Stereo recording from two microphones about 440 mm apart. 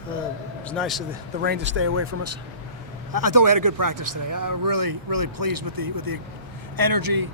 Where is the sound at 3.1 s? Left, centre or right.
Right.